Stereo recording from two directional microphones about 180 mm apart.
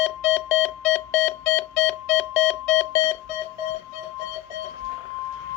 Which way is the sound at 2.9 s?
25° left (ahead or behind).